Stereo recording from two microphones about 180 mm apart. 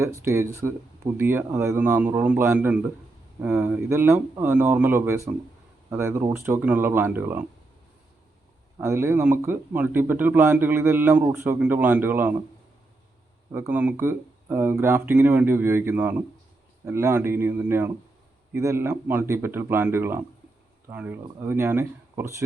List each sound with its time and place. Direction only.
0.0 s speech: 15° right (ahead or behind)
8.8 s speech: 15° right (ahead or behind)
13.5 s speech: 10° right (ahead or behind)